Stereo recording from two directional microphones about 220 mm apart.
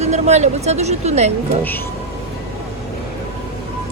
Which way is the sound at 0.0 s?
30° right (ahead or behind).